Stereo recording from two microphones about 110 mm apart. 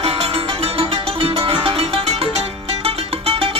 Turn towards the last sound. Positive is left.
turn(degrees=-60)  # may be behind; listen again after turning